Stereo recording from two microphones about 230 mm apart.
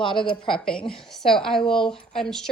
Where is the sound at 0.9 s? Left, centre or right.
Centre.